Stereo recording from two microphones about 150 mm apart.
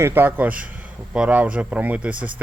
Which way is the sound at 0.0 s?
15° right (ahead or behind).